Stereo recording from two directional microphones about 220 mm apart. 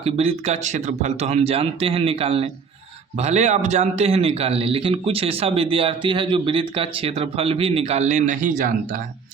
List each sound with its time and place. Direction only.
0.0 s a man's voice: 25° right (ahead or behind)